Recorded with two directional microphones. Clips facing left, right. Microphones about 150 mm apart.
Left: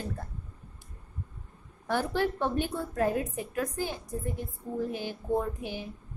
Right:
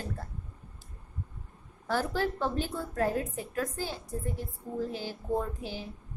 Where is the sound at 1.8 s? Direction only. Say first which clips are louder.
Left 1 dB; 15° left (ahead or behind).